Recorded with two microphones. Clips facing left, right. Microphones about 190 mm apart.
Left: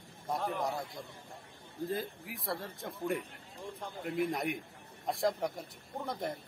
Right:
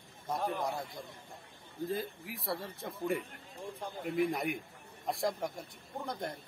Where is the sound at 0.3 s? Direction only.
Centre (ahead or behind).